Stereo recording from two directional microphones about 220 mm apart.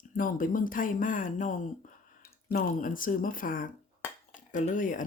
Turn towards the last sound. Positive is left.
turn(degrees=35)  # may be behind; listen again after turning